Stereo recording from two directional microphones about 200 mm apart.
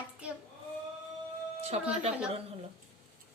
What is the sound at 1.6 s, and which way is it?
Music, 30° right (ahead or behind).